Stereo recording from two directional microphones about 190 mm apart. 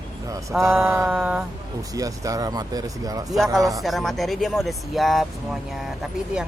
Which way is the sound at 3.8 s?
Centre (ahead or behind).